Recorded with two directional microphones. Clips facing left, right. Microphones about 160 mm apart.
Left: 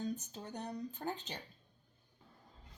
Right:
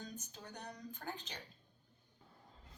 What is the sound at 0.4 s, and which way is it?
Speech, 25° left (ahead or behind).